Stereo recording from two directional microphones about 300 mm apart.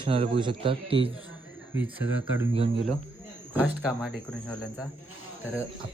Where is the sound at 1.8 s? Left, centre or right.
Centre.